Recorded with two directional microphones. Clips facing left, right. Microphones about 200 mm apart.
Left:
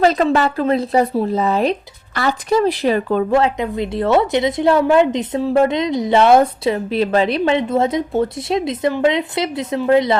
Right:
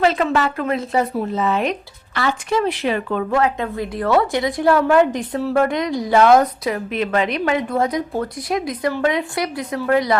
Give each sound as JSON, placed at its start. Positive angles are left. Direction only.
{"t": 0.0, "sound": "speech", "side_deg": 35}
{"t": 3.6, "sound": "a woman's voice", "side_deg": 20}